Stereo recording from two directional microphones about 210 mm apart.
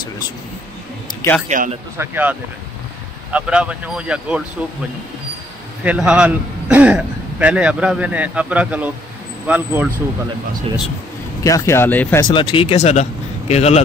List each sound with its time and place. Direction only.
1.5 s speech: 35° right (ahead or behind)
2.0 s a man's voice: 10° right (ahead or behind)
5.9 s a man's voice: 5° right (ahead or behind)
11.4 s speech: 15° left (ahead or behind)
12.2 s speech: 20° left (ahead or behind)